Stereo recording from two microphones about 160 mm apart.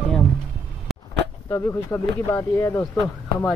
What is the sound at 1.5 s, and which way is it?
A woman's voice, 15° left (ahead or behind).